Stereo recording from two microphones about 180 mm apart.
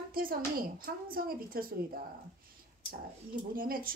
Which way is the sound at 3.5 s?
50° right (ahead or behind).